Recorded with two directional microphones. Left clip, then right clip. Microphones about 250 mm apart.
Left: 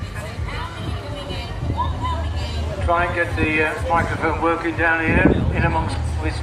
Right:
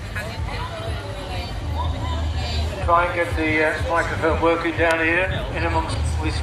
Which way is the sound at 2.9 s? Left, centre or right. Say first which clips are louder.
Right 1 dB; left.